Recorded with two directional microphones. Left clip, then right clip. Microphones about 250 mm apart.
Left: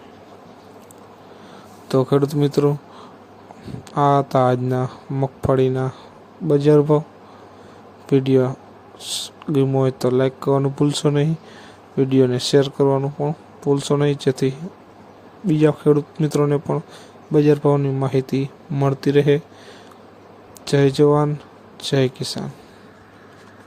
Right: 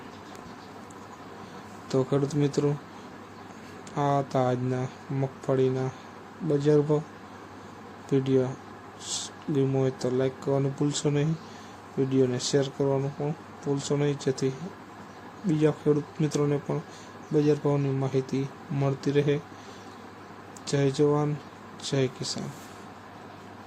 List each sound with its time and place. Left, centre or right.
1.9 s speech: left
3.9 s speech: left
8.1 s speech: left
20.7 s speech: left